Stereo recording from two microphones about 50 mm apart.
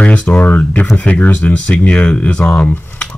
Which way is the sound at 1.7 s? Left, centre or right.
Centre.